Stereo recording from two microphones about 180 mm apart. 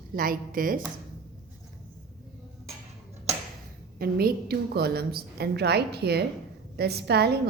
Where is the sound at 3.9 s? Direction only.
55° right (ahead or behind).